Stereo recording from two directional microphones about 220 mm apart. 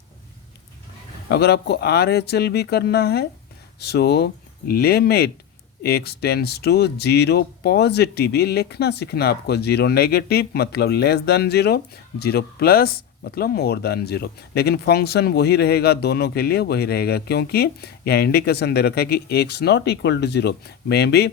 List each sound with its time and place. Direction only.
1.3 s speech: 50° left (ahead or behind)